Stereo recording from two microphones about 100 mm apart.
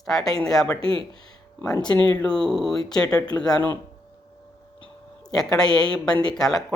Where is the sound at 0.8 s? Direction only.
65° right (ahead or behind).